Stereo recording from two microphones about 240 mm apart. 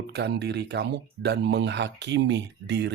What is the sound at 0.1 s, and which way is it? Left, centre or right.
Speech, right.